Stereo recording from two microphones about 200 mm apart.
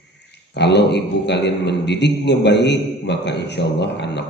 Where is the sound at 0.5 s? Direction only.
60° left (ahead or behind).